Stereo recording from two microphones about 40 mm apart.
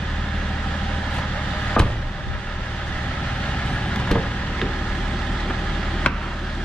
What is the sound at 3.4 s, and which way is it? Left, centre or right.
Vehicle, left.